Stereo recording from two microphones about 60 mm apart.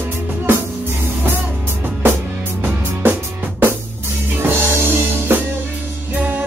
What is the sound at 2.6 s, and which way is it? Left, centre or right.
Music, right.